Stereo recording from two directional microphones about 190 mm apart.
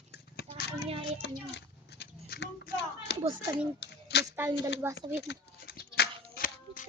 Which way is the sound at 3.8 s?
60° left (ahead or behind).